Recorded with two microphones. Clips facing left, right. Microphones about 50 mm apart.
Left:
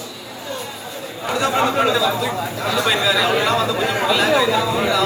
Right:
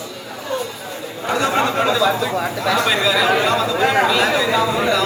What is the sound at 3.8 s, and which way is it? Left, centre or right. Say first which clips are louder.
Speech: right 5 dB; right.